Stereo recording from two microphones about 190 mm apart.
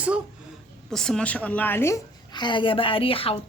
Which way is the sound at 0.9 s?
5° left (ahead or behind).